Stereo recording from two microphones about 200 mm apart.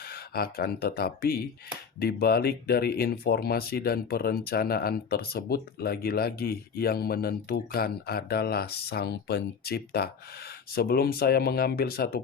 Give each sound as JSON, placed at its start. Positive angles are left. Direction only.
{"t": 0.1, "sound": "speech", "side_deg": 50}